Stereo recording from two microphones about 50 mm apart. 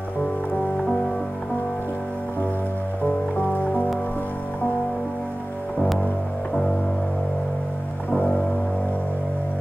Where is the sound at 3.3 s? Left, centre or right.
Left.